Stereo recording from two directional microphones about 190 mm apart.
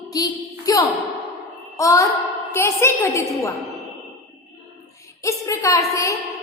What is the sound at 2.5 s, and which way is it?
A woman's voice, 15° left (ahead or behind).